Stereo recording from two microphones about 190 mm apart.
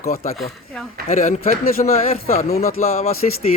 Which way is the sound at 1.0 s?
40° left (ahead or behind).